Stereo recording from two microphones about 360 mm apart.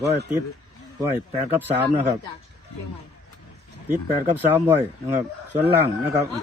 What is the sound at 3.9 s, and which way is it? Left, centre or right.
Speech, centre.